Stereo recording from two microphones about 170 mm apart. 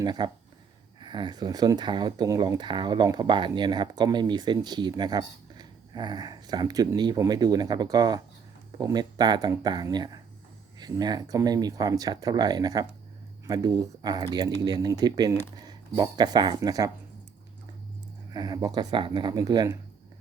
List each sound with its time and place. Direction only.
0.0 s speech: 25° right (ahead or behind)
18.3 s speech: 25° right (ahead or behind)